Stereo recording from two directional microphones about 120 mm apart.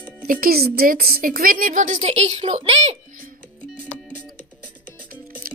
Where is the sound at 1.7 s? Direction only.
90° right; by 2.9 s 60° right (ahead or behind).